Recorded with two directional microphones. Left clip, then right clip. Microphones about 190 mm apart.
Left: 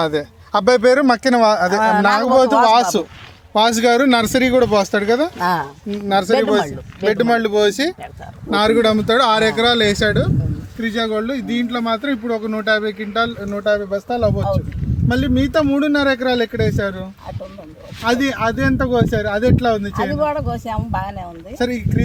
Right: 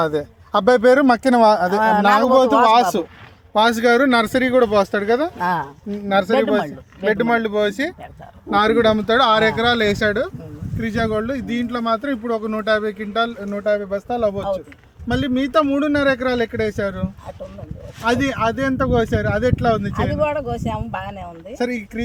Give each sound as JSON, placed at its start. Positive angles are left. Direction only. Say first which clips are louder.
{"t": 0.0, "sound": "speech", "louder": "left 1 dB", "side_deg": -20}
{"t": 3.5, "sound": "speech", "louder": "left 1 dB", "side_deg": 30}
{"t": 5.4, "sound": "speech", "louder": "left 2 dB", "side_deg": 10}
{"t": 5.9, "sound": "speech", "louder": "left 1 dB", "side_deg": 40}
{"t": 6.6, "sound": "speech", "louder": "left 3 dB", "side_deg": 20}
{"t": 7.1, "sound": "speech", "louder": "left 2 dB", "side_deg": 40}
{"t": 20.1, "sound": "speech", "louder": "right 1 dB", "side_deg": -15}